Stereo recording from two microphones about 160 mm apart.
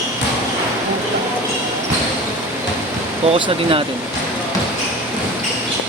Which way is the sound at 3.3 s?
30° right (ahead or behind).